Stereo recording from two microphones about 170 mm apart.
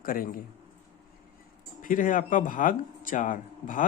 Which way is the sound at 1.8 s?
50° left (ahead or behind).